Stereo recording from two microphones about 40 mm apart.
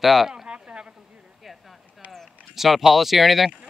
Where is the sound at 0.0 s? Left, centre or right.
Centre.